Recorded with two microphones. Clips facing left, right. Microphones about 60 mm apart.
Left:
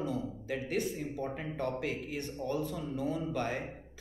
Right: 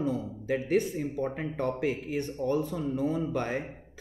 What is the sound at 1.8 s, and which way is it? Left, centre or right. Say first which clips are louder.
Speech: right 6 dB; right.